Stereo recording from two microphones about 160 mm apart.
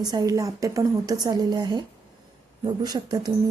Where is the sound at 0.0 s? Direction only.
25° right (ahead or behind).